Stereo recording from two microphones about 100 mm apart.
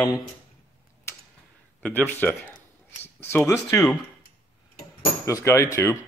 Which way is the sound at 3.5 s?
30° left (ahead or behind).